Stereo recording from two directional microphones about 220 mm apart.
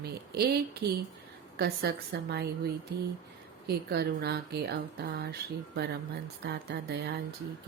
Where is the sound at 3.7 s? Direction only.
45° right (ahead or behind).